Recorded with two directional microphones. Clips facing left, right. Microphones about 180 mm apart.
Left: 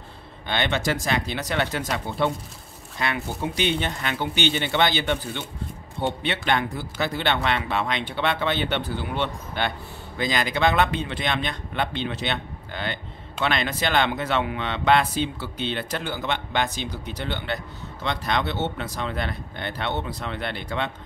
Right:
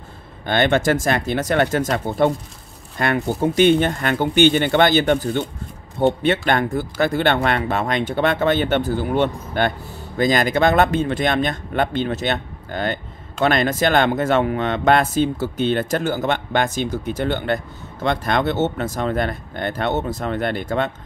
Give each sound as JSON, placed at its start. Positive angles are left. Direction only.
{"t": 0.5, "sound": "speech", "side_deg": -50}